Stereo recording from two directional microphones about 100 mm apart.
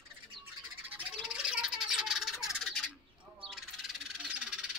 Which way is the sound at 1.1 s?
5° right (ahead or behind).